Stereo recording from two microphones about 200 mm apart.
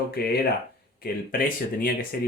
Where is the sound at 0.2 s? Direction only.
50° left (ahead or behind).